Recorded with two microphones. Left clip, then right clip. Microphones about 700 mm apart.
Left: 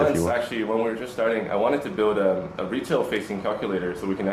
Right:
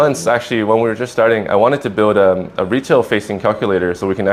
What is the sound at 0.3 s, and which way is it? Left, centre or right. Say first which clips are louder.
Speech: right 11 dB; right.